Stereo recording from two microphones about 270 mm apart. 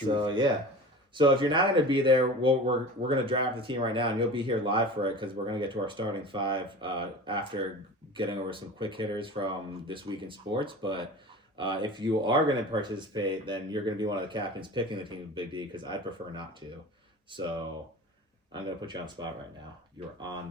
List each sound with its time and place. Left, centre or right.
0.1 s speech: centre
18.5 s speech: centre